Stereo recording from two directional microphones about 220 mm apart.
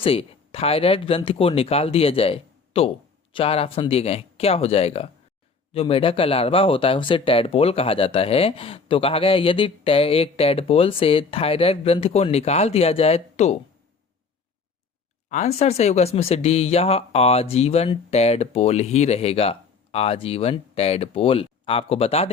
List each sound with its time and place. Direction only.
0.0 s speech: 25° left (ahead or behind)
15.3 s speech: 30° left (ahead or behind)